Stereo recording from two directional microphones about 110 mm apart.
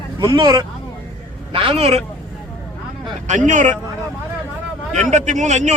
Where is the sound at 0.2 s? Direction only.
40° right (ahead or behind).